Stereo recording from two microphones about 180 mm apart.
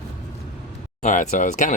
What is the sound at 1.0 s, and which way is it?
Speech, 45° left (ahead or behind).